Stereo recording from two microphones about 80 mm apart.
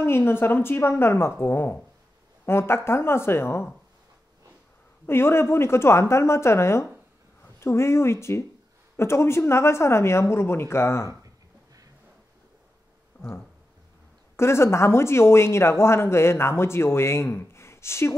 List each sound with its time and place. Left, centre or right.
0.0 s a woman's voice: left
5.0 s speech: left
14.3 s speech: left